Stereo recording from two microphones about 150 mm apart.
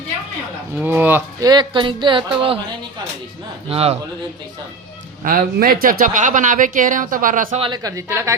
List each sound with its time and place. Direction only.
0.8 s speech: 10° right (ahead or behind)
1.4 s speech: 30° right (ahead or behind)
3.7 s speech: 40° right (ahead or behind)
5.2 s speech: 70° right (ahead or behind)
7.7 s a woman's voice: 25° right (ahead or behind)